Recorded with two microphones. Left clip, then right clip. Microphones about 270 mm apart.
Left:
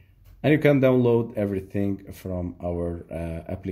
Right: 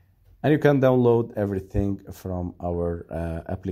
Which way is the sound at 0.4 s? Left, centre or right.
Right.